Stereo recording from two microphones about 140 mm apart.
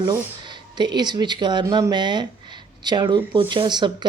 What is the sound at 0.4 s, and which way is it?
Speech, 30° right (ahead or behind).